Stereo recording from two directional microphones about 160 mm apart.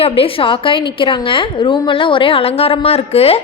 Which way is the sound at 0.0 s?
35° left (ahead or behind).